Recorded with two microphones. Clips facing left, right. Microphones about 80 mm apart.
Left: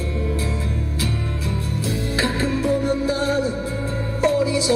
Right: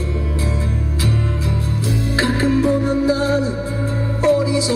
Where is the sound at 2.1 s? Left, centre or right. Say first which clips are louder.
Right 6 dB; right.